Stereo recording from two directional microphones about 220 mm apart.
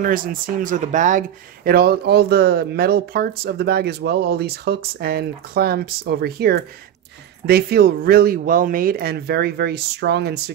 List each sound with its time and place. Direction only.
0.0 s speech: 40° right (ahead or behind)